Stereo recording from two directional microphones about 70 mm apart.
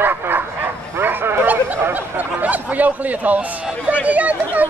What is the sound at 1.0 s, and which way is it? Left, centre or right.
Bow-wow, right.